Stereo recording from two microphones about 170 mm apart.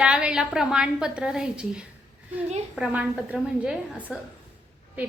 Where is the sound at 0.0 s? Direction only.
5° right (ahead or behind).